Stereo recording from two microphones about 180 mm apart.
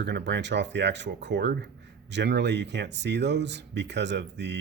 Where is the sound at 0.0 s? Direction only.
75° right (ahead or behind).